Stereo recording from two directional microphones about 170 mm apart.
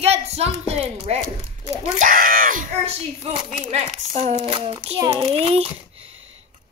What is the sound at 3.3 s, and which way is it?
A child's voice, 35° right (ahead or behind).